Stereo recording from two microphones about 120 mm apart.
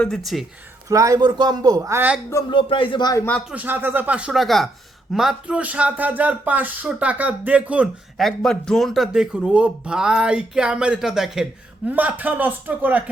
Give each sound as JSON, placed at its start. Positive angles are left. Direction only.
{"t": 0.0, "sound": "speech", "side_deg": 0}
{"t": 0.9, "sound": "a man's voice", "side_deg": -30}
{"t": 2.5, "sound": "speech", "side_deg": 45}
{"t": 3.5, "sound": "speech", "side_deg": -15}
{"t": 8.4, "sound": "speech", "side_deg": 5}
{"t": 11.9, "sound": "speech", "side_deg": -15}